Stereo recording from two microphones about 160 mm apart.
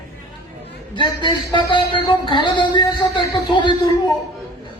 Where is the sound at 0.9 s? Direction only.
30° left (ahead or behind).